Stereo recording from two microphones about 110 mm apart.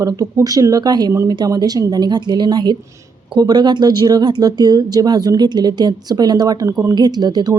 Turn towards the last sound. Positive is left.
turn(degrees=-40)  # may be behind; listen again after turning